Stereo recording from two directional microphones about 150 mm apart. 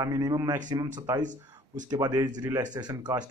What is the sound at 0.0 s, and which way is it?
Speech, 25° right (ahead or behind).